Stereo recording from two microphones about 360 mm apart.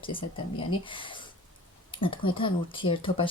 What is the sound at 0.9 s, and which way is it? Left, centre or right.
Speech, centre.